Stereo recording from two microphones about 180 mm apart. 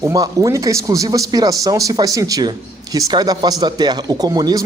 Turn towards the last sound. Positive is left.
turn(degrees=-20)  # may be behind; listen again after turning